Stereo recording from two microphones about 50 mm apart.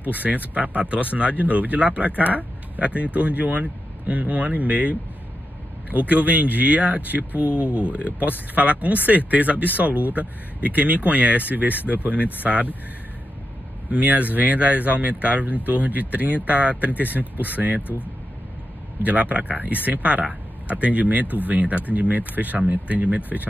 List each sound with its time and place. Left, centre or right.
0.2 s speech: centre
0.6 s speech: right
13.8 s speech: right
19.0 s speech: right